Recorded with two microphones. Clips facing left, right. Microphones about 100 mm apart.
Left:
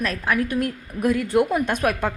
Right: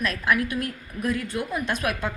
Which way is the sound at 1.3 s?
60° left (ahead or behind).